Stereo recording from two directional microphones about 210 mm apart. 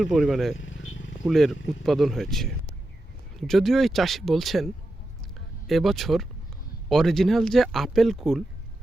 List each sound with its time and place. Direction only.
0.0 s speech: centre (ahead or behind)
0.6 s vehicle: 70° left (ahead or behind)
1.2 s speech: centre (ahead or behind)